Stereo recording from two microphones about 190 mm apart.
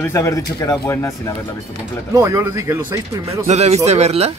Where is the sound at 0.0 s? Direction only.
15° left (ahead or behind).